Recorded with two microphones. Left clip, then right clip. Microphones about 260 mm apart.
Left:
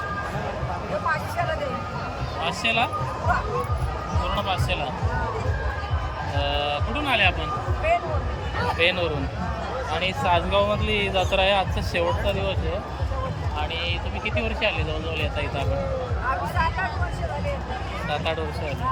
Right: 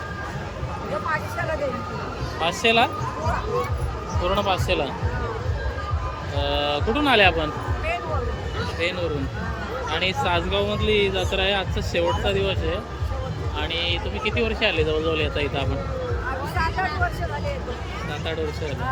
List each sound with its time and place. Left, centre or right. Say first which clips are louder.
2.4 s speech: right 4 dB; centre
4.3 s speech: right 5 dB; centre
6.4 s speech: right 3 dB; centre
8.8 s speech: left 4 dB; centre
9.9 s speech: even; centre
13.6 s speech: right 3 dB; centre